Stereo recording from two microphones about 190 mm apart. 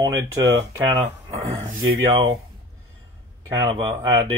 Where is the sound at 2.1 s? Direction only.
20° right (ahead or behind).